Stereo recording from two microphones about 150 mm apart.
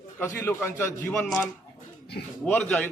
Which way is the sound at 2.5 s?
10° left (ahead or behind).